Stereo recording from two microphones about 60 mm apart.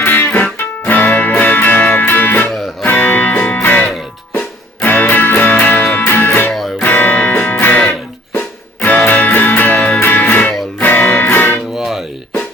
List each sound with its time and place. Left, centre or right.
0.0 s music: left
6.5 s music: centre
6.8 s music: left
11.8 s music: centre